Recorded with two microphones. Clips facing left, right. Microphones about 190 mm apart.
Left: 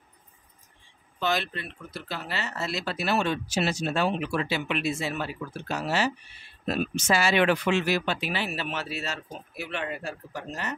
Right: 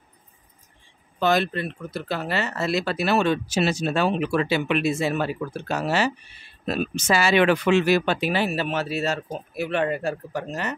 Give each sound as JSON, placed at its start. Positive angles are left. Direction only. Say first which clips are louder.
{"t": 1.2, "sound": "speech", "louder": "right 7 dB", "side_deg": -45}
{"t": 7.1, "sound": "speech", "louder": "right 4 dB", "side_deg": -90}